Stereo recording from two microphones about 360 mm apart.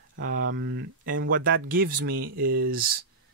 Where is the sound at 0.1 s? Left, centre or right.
Right.